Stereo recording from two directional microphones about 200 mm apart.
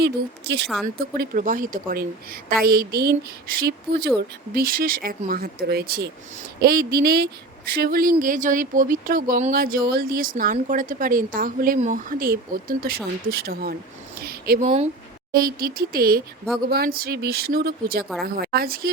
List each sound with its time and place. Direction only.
0.0 s speech: 55° right (ahead or behind)
1.1 s speech: 45° right (ahead or behind)